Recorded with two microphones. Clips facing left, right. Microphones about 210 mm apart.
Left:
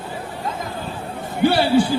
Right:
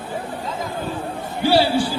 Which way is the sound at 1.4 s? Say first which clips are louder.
Left 2 dB; 55° left (ahead or behind).